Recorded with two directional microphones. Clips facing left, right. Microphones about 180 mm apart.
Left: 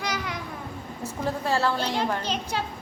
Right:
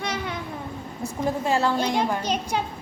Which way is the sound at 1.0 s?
15° right (ahead or behind).